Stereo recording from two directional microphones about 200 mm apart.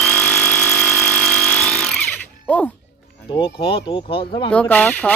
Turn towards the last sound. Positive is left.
turn(degrees=5)  # may be behind; listen again after turning